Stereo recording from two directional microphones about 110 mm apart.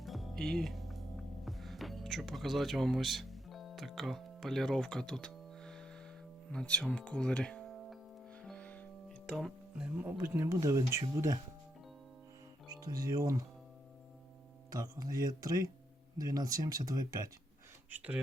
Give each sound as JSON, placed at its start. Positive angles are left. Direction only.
{"t": 0.0, "sound": "music", "side_deg": 0}
{"t": 6.5, "sound": "speech", "side_deg": 10}
{"t": 8.4, "sound": "music", "side_deg": 10}
{"t": 9.2, "sound": "speech", "side_deg": 0}
{"t": 12.6, "sound": "speech", "side_deg": -35}
{"t": 14.7, "sound": "speech", "side_deg": -35}
{"t": 17.9, "sound": "speech", "side_deg": -15}